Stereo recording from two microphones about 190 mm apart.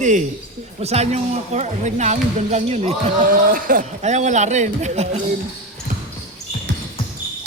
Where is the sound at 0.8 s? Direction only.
35° right (ahead or behind).